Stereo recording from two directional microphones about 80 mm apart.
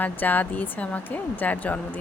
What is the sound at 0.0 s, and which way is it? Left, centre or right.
Speech, left.